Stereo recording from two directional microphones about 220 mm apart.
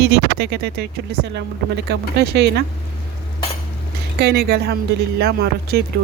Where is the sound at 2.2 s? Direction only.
50° right (ahead or behind).